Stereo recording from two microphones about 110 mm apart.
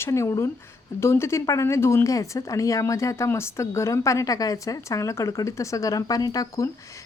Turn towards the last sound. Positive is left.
turn(degrees=30)  # may be behind; listen again after turning